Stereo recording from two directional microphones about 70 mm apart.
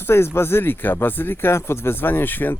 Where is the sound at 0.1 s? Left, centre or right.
Left.